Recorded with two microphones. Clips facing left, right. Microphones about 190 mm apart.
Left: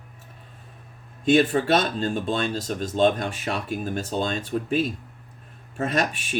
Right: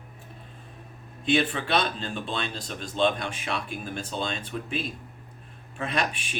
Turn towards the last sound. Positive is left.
turn(degrees=40)  # may be behind; listen again after turning